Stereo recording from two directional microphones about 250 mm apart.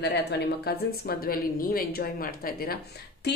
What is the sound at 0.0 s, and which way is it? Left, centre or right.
Speech, left.